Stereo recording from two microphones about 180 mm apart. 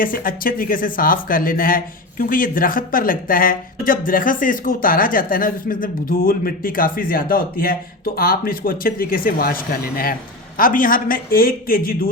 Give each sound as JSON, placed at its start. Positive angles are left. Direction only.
{"t": 0.0, "sound": "speech", "side_deg": 50}